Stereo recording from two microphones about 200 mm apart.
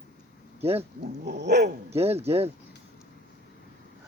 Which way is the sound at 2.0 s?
30° right (ahead or behind).